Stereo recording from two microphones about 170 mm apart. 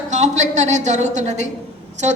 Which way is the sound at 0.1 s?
45° right (ahead or behind).